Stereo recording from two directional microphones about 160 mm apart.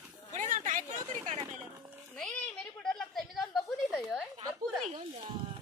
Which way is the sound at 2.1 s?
5° left (ahead or behind).